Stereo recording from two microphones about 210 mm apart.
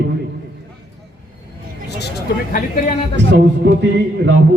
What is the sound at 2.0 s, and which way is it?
Speech, 45° left (ahead or behind).